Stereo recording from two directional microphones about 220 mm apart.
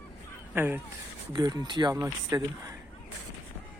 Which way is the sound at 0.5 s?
10° right (ahead or behind).